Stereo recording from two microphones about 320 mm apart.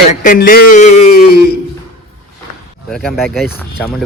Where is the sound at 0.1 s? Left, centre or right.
Left.